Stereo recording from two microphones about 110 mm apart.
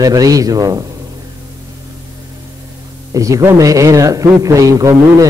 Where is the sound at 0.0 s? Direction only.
35° right (ahead or behind).